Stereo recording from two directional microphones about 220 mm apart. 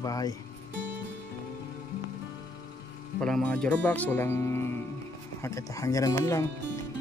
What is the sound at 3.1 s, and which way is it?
Speech, 5° left (ahead or behind).